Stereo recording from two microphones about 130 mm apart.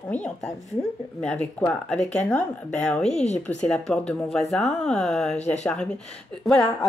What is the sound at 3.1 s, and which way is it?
Speech, 60° left (ahead or behind).